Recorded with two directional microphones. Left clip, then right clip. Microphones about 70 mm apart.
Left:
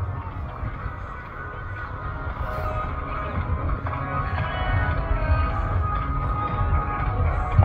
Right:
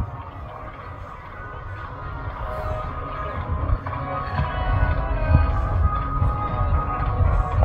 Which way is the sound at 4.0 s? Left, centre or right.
Right.